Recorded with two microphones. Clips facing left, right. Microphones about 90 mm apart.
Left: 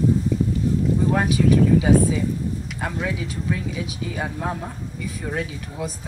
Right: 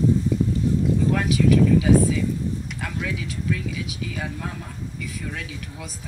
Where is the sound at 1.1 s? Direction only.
30° left (ahead or behind).